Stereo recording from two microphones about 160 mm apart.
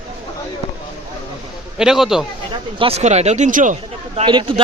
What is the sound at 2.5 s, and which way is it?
Speech, 35° right (ahead or behind).